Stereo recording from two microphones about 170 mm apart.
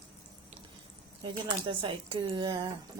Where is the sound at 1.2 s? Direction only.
30° right (ahead or behind).